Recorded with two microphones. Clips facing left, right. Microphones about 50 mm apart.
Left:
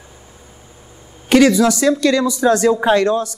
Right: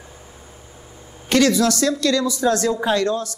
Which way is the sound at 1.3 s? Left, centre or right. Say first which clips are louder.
Left 5 dB; centre.